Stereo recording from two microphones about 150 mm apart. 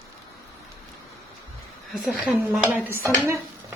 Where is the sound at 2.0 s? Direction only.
Centre (ahead or behind).